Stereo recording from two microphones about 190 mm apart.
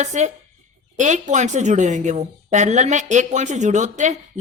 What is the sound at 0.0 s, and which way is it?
Speech, 35° right (ahead or behind).